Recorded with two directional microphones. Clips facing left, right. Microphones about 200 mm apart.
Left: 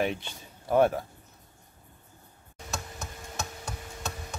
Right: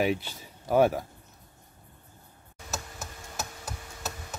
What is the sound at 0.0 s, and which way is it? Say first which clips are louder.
Speech: right 3 dB; 5° right (ahead or behind).